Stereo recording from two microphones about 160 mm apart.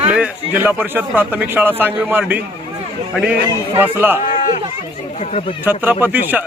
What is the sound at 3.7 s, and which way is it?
Speech, 10° right (ahead or behind).